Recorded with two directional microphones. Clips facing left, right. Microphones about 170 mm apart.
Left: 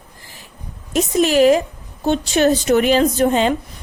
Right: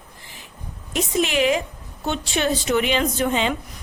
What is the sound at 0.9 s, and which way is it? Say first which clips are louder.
A woman's voice: left 6 dB; 40° left (ahead or behind).